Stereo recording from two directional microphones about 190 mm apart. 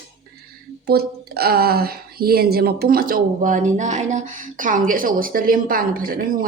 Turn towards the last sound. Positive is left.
turn(degrees=-50)  # may be behind; listen again after turning